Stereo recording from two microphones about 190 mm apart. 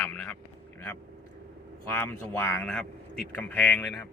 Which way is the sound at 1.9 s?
10° left (ahead or behind).